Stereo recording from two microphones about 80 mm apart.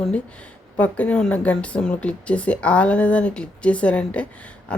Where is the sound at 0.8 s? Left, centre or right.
Centre.